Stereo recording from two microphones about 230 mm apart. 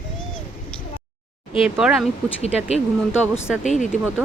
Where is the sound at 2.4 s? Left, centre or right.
Left.